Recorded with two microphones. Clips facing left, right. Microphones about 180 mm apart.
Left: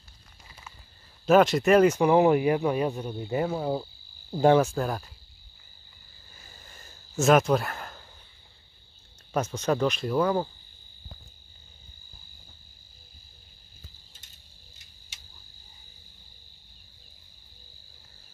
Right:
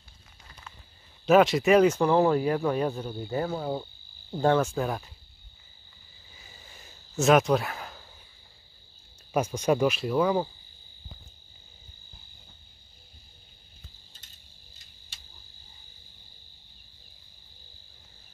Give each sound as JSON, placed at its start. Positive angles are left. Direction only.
{"t": 0.5, "sound": "frog", "side_deg": 5}
{"t": 1.2, "sound": "speech", "side_deg": 0}
{"t": 4.4, "sound": "insect", "side_deg": 15}
{"t": 4.7, "sound": "speech", "side_deg": 0}
{"t": 6.3, "sound": "a sound", "side_deg": 0}
{"t": 9.3, "sound": "speech", "side_deg": -10}